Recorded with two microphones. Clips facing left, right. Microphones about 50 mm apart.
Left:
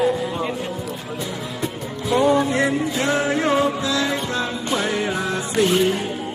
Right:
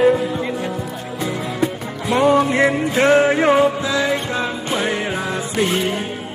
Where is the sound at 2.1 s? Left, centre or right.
Right.